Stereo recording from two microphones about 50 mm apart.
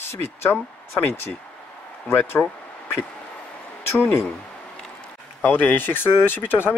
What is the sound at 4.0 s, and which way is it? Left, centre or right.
Speech, left.